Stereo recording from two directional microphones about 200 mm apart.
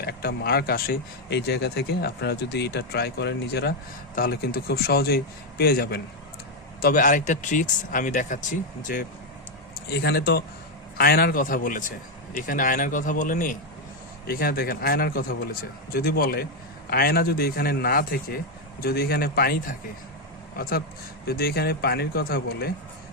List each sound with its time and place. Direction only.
0.0 s speech: 50° left (ahead or behind)
6.8 s speech: 40° left (ahead or behind)
9.9 s speech: 55° left (ahead or behind)